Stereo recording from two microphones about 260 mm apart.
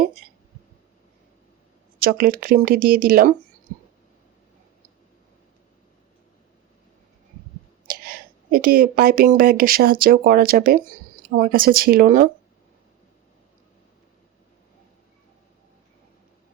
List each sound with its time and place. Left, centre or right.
0.0 s a sound: right
2.0 s speech: right
7.9 s speech: right